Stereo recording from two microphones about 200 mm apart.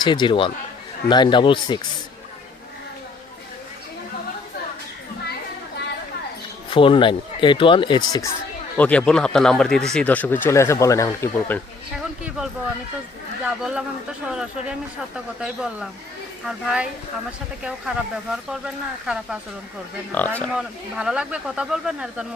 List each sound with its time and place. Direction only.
0.0 s speech: 25° left (ahead or behind)
6.7 s speech: 25° left (ahead or behind)
8.8 s speech: 5° left (ahead or behind)
11.9 s speech: 5° right (ahead or behind)
20.1 s speech: 10° left (ahead or behind)
20.5 s speech: 5° right (ahead or behind)